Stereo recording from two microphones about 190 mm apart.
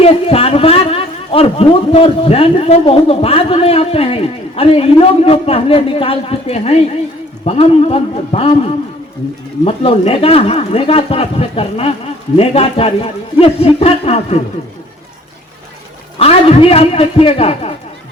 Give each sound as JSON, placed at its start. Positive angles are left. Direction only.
{"t": 0.0, "sound": "a man's voice", "side_deg": 30}
{"t": 9.6, "sound": "a man's voice", "side_deg": 30}
{"t": 16.1, "sound": "a man's voice", "side_deg": 30}